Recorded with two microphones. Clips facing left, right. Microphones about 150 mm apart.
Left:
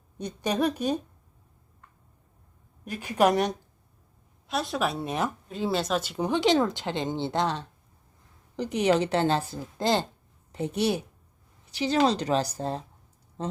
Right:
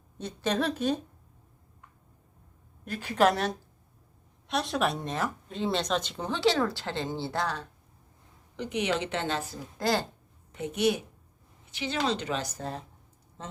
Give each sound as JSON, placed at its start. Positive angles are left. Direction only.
{"t": 0.2, "sound": "speech", "side_deg": 15}
{"t": 2.8, "sound": "speech", "side_deg": 10}
{"t": 4.4, "sound": "speech", "side_deg": 0}
{"t": 8.5, "sound": "speech", "side_deg": 40}
{"t": 10.5, "sound": "speech", "side_deg": 35}